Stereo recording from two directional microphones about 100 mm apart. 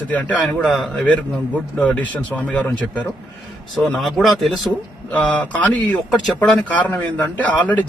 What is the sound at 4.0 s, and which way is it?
Speech, centre (ahead or behind).